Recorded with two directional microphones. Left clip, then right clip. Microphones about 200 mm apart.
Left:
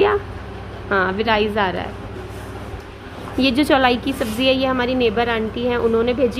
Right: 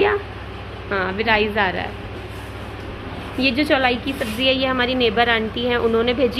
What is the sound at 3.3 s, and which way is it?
A woman's voice, 45° left (ahead or behind).